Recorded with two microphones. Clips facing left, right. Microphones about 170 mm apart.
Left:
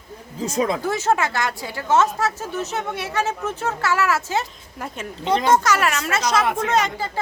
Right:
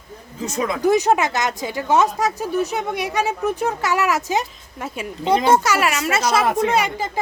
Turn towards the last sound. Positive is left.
turn(degrees=-10)  # may be behind; listen again after turning